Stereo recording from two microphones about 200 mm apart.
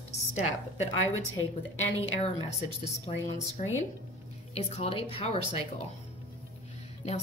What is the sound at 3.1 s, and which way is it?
Speech, 25° left (ahead or behind).